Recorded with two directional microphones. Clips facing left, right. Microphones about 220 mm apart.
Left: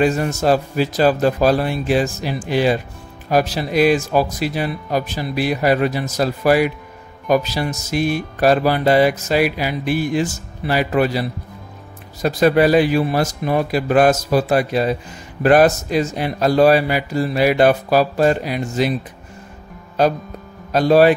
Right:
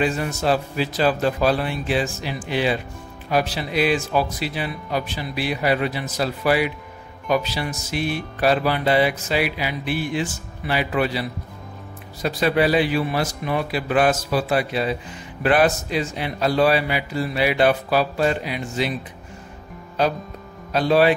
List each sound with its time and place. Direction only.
0.0 s speech: 45° left (ahead or behind)
20.0 s speech: 45° left (ahead or behind)